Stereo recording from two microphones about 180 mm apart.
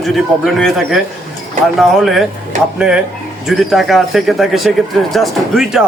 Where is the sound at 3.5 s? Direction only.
Centre (ahead or behind).